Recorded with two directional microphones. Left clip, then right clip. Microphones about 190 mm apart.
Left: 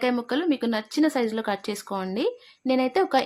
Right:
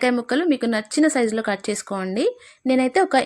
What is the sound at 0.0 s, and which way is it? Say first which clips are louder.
Speech: right 5 dB; 15° right (ahead or behind).